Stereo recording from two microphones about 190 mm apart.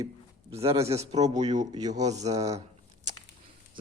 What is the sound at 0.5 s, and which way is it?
Speech, 30° right (ahead or behind).